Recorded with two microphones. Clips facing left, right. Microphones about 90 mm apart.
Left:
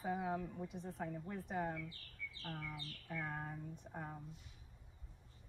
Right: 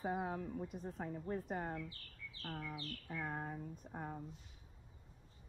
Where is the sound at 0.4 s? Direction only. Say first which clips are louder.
Right 2 dB; 40° right (ahead or behind).